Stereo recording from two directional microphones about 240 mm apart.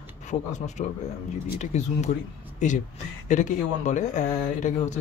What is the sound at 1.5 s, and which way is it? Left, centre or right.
Speech, left.